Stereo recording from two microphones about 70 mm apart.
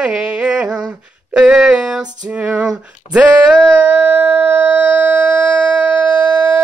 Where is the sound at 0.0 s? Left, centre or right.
Centre.